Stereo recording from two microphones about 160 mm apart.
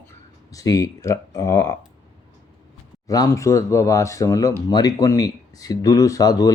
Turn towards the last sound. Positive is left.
turn(degrees=20)  # may be behind; listen again after turning